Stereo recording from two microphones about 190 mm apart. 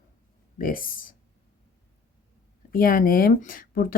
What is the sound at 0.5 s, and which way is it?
Speech, 50° left (ahead or behind).